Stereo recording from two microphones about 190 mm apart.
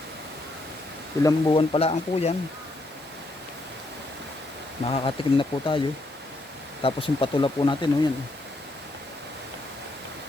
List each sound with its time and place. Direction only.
1.2 s speech: 20° left (ahead or behind)
4.9 s speech: 25° left (ahead or behind)
6.8 s speech: 30° left (ahead or behind)